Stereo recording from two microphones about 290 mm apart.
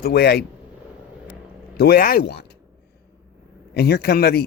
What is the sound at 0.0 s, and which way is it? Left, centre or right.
Speech, left.